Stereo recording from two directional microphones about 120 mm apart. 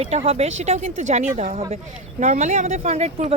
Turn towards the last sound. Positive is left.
turn(degrees=-65)  # may be behind; listen again after turning